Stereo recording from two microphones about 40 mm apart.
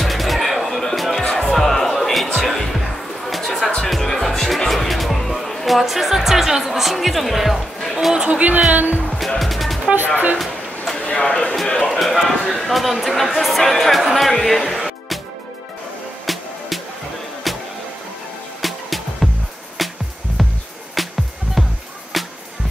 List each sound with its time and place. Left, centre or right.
0.0 s music: centre
1.3 s music: centre
7.8 s chatter: centre
8.3 s speech: right
9.4 s music: centre
11.1 s speech: centre
11.9 s speech: centre
16.3 s music: centre
21.6 s music: centre